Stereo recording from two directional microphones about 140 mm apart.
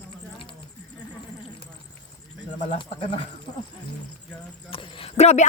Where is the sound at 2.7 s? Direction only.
40° left (ahead or behind).